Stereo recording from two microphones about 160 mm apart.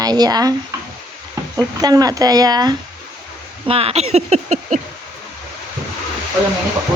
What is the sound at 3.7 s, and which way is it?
Speech, 40° right (ahead or behind).